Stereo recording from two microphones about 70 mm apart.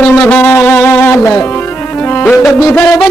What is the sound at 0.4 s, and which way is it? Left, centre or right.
Music, left.